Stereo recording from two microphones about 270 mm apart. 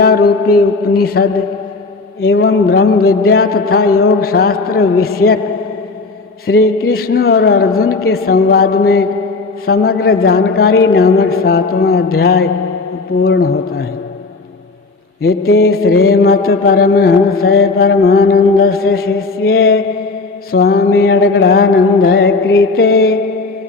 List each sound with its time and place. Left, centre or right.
0.0 s mantra: left
2.2 s a man's voice: left
3.5 s mantra: left
6.5 s a man's voice: left
6.9 s mantra: left
15.5 s mantra: left
22.3 s a man's voice: left
22.7 s mantra: left